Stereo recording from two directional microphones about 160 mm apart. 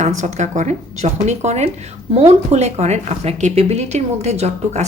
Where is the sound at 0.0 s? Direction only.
45° right (ahead or behind).